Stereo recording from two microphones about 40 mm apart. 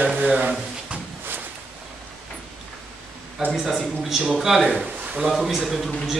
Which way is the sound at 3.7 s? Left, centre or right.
Centre.